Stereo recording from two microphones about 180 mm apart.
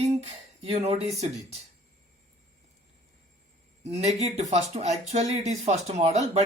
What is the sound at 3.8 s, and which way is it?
Speech, 40° right (ahead or behind).